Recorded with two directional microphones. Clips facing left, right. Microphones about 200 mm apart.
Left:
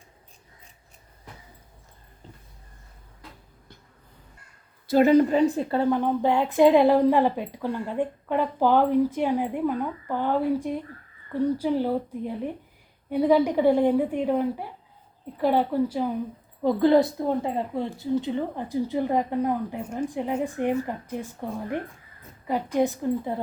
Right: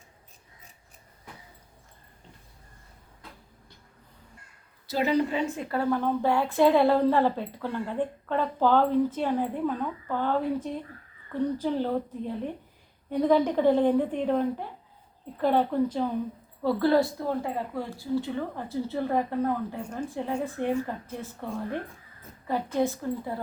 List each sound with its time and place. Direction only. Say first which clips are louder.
4.9 s a woman's voice: left 8 dB; 50° left (ahead or behind); by 23.4 s 20° left (ahead or behind)